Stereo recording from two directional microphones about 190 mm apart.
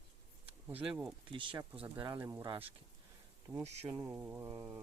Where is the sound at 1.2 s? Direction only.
25° right (ahead or behind).